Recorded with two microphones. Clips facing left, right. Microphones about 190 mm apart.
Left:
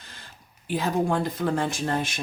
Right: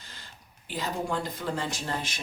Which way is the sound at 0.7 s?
55° left (ahead or behind).